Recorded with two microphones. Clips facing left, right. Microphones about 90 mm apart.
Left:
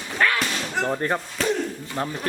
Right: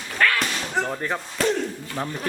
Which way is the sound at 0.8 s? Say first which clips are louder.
Left 2 dB; 5° left (ahead or behind).